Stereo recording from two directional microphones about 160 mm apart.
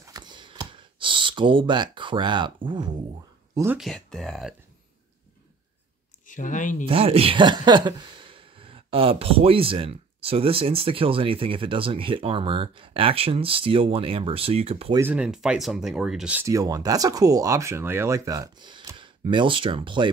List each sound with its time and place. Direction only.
0.0 s a sound: 25° right (ahead or behind)
3.7 s speech: centre (ahead or behind)
6.2 s speech: 55° left (ahead or behind)
6.9 s speech: 35° right (ahead or behind)
15.0 s speech: 10° right (ahead or behind)
16.4 s speech: 20° right (ahead or behind)